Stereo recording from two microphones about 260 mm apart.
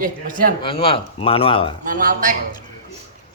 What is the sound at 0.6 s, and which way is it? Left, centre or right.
Speech, left.